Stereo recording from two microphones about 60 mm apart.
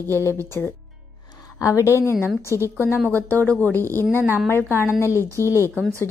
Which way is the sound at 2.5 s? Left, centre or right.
Right.